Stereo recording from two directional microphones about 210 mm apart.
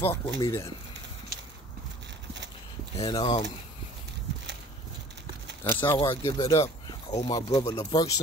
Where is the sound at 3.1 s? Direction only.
20° left (ahead or behind).